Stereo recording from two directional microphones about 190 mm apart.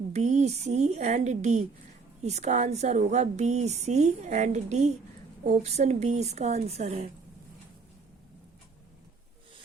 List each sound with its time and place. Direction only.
0.1 s speech: 35° right (ahead or behind)